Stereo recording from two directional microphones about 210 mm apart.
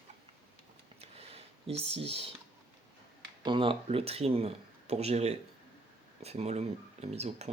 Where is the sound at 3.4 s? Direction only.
25° right (ahead or behind).